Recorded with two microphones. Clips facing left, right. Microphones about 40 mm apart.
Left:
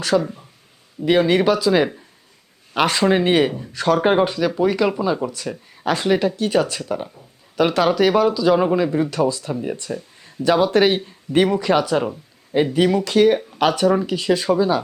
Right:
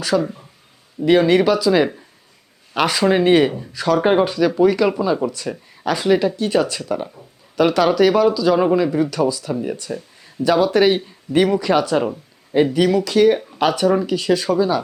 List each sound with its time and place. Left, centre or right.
0.1 s speech: centre
3.7 s speech: centre
4.0 s speech: centre
6.8 s speech: centre
9.9 s a sound: centre
10.9 s speech: centre